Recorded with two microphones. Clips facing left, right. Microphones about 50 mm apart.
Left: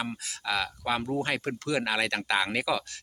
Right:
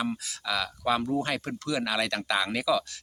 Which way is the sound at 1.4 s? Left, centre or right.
Left.